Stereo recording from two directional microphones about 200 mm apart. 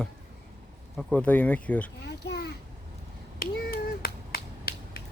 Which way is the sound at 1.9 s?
55° left (ahead or behind).